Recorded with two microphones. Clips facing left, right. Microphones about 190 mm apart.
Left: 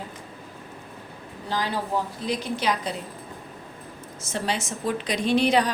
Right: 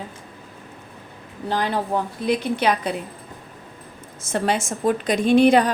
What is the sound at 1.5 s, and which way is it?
A woman's voice, 60° right (ahead or behind).